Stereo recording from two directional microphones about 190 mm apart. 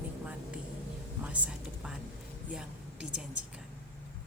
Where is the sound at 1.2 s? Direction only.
5° right (ahead or behind).